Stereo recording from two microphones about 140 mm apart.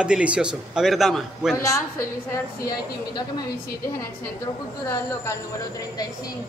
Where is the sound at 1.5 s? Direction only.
20° left (ahead or behind).